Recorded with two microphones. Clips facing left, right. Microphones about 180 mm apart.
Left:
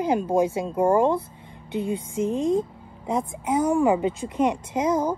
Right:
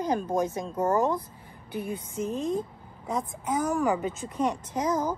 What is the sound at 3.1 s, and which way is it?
Speech, 30° left (ahead or behind).